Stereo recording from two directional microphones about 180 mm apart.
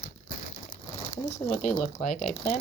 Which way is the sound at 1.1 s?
35° left (ahead or behind).